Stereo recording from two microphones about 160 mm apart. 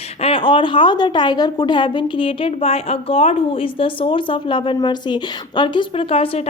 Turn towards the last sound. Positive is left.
turn(degrees=35)  # may be behind; listen again after turning